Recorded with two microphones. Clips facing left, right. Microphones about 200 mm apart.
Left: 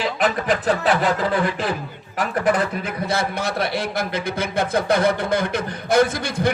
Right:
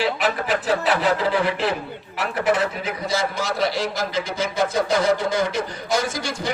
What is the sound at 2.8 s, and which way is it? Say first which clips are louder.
A man's voice: left 1 dB; 55° left (ahead or behind).